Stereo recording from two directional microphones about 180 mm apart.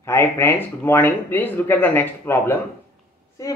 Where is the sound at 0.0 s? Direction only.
15° left (ahead or behind).